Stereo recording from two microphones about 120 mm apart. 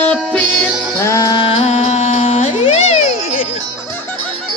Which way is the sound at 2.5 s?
55° left (ahead or behind).